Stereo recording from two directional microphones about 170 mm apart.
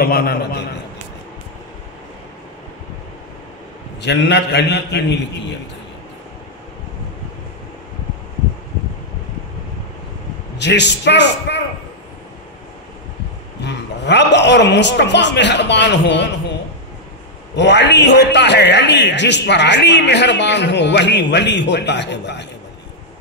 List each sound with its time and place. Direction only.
0.0 s a man's voice: 65° left (ahead or behind)
4.0 s a man's voice: 90° left
10.6 s a man's voice: 90° left
13.6 s a man's voice: 90° left
17.6 s a man's voice: 90° left